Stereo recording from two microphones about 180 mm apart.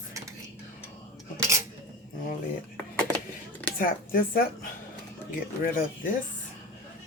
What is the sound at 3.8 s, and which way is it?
Speech, 55° left (ahead or behind).